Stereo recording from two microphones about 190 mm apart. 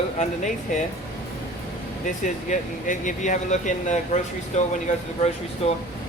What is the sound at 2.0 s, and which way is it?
Speech, 40° left (ahead or behind).